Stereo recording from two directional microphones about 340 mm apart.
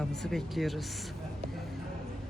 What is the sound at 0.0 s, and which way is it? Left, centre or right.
Speech, centre.